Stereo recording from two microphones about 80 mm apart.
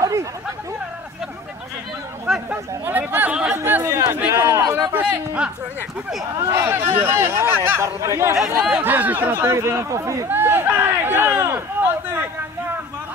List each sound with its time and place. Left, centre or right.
0.0 s chatter: right
2.3 s chatter: centre
2.8 s chatter: right
3.5 s chatter: right
3.8 s a sound: right
4.9 s a sound: centre
6.3 s speech: right
8.4 s speech: centre
8.8 s speech: right
9.4 s speech: right
10.2 s a sound: right